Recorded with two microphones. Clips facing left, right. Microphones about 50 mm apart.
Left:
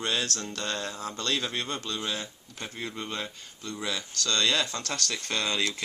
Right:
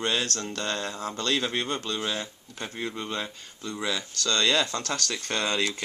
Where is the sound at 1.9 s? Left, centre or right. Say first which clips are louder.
Right 3 dB; centre.